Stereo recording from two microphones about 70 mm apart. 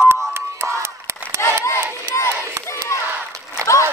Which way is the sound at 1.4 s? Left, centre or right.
Left.